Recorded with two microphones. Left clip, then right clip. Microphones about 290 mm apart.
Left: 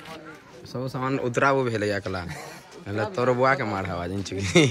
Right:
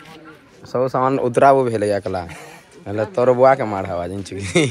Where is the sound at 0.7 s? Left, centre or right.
Centre.